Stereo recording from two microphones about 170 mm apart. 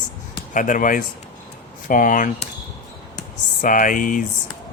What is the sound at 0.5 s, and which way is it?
Speech, 50° left (ahead or behind).